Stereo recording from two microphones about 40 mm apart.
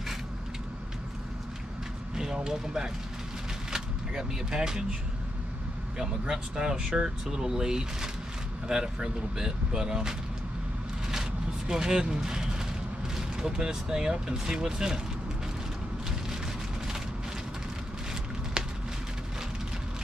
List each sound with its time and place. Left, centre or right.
2.1 s speech: centre
5.9 s speech: centre
11.7 s speech: centre